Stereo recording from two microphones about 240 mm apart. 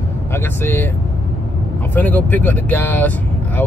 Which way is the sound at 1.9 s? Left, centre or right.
Centre.